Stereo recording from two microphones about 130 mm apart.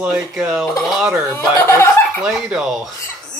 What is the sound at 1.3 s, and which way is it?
Speech, 15° left (ahead or behind).